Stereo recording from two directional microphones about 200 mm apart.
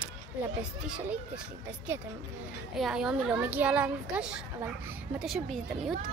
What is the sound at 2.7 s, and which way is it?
A child's voice, centre (ahead or behind).